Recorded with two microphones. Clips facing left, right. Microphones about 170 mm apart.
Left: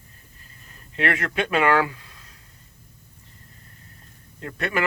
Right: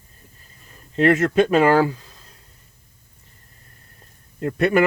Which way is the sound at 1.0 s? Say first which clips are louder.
Right 9 dB; 40° right (ahead or behind).